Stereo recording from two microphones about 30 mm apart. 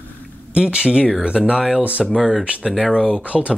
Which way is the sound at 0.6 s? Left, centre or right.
Right.